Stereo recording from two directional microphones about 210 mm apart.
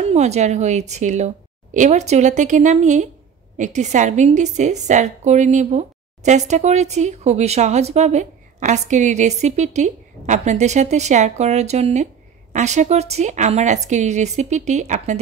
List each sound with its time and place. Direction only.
0.0 s a woman's voice: 30° right (ahead or behind)